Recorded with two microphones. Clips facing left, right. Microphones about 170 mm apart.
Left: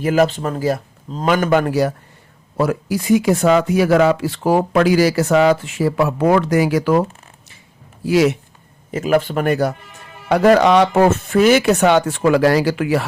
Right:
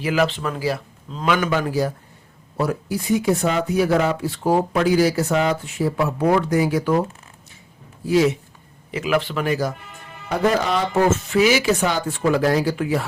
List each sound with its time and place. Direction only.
0.0 s a man's voice: 45° left (ahead or behind); by 1.9 s 65° left (ahead or behind)
2.6 s speech: 90° left
8.0 s speech: 80° left
8.9 s a man's voice: 45° left (ahead or behind)
10.2 s speech: 80° left